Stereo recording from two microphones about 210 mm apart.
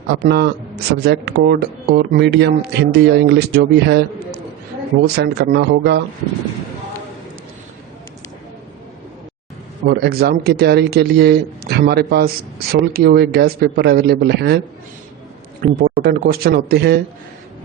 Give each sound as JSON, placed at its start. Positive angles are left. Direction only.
{"t": 0.2, "sound": "a man's voice", "side_deg": -50}
{"t": 5.0, "sound": "a man's voice", "side_deg": -50}
{"t": 9.8, "sound": "a man's voice", "side_deg": -50}
{"t": 15.6, "sound": "a man's voice", "side_deg": -45}